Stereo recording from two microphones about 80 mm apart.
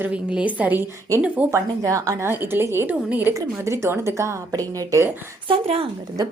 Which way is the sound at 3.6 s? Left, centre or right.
Right.